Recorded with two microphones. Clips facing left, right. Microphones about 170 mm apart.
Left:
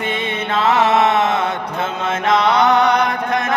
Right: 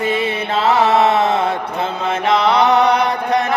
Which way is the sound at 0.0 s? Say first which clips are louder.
Right 4 dB; 35° right (ahead or behind).